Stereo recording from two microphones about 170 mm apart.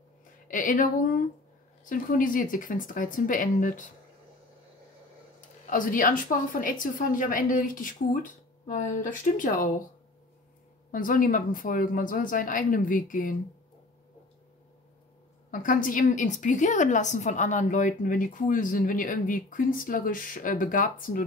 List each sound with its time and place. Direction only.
0.5 s a woman's voice: 50° left (ahead or behind)
5.7 s a woman's voice: 55° left (ahead or behind)
10.9 s a woman's voice: 55° left (ahead or behind)
15.5 s a woman's voice: 50° left (ahead or behind)